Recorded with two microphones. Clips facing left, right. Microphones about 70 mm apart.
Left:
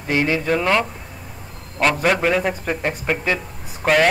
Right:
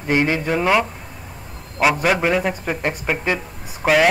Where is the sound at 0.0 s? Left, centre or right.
Right.